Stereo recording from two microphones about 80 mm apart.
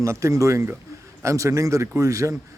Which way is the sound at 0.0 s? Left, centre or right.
Right.